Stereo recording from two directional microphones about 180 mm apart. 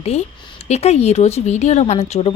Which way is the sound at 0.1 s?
35° left (ahead or behind).